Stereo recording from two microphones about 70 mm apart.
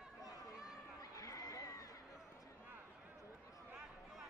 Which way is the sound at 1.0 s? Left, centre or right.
Left.